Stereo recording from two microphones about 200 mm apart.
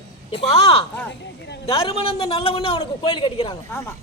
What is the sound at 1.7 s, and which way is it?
A woman's voice, 30° left (ahead or behind).